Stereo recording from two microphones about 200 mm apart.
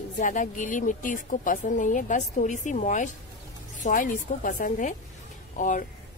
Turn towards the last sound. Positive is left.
turn(degrees=40)  # may be behind; listen again after turning